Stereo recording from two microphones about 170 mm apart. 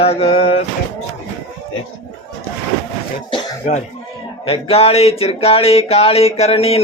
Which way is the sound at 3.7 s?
45° left (ahead or behind).